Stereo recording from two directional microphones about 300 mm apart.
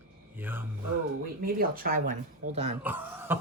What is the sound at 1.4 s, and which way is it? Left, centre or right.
Speech, right.